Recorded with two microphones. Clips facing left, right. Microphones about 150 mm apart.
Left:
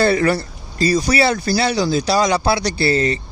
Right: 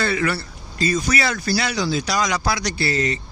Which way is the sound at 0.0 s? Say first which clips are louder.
Left 7 dB; 35° left (ahead or behind).